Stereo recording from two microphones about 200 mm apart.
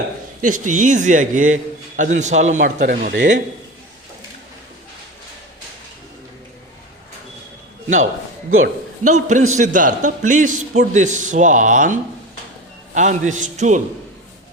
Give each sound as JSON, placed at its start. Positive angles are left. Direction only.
{"t": 0.4, "sound": "a man's voice", "side_deg": -40}
{"t": 8.4, "sound": "a man's voice", "side_deg": -90}
{"t": 9.0, "sound": "a man's voice", "side_deg": -35}